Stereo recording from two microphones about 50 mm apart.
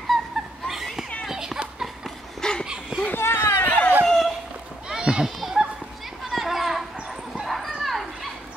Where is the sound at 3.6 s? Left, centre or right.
Left.